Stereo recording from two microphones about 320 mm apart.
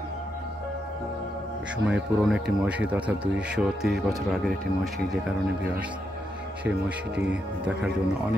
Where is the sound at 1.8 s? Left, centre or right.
Centre.